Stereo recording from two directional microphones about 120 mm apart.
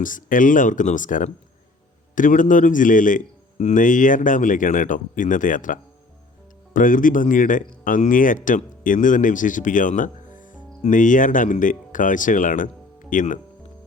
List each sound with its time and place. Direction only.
0.0 s speech: 90° left